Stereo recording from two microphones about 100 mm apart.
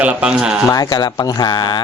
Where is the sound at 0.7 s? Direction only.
40° left (ahead or behind).